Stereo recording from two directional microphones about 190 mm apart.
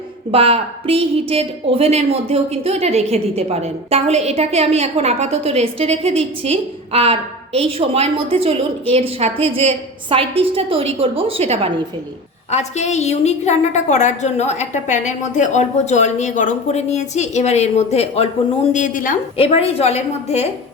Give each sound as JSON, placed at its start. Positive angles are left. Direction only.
{"t": 0.3, "sound": "a woman's voice", "side_deg": -30}
{"t": 12.5, "sound": "a woman's voice", "side_deg": 35}
{"t": 19.4, "sound": "a woman's voice", "side_deg": 30}